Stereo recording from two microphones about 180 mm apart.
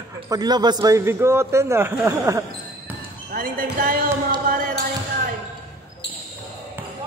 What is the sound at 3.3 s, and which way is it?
Speech, 50° right (ahead or behind).